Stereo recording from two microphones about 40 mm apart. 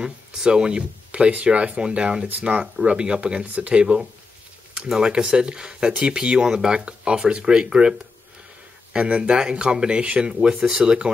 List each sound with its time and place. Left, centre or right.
0.0 s speech: centre
1.8 s speech: right
3.4 s speech: right
3.7 s speech: right
8.9 s speech: right
10.5 s speech: centre